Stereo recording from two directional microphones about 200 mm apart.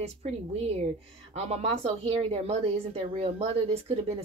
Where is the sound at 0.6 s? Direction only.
30° right (ahead or behind).